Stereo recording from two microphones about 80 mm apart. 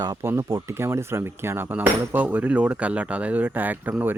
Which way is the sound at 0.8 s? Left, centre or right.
Right.